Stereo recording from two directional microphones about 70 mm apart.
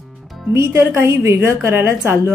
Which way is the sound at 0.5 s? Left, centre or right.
Right.